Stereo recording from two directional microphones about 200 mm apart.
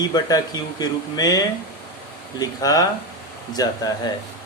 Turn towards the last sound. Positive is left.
turn(degrees=20)  # may be behind; listen again after turning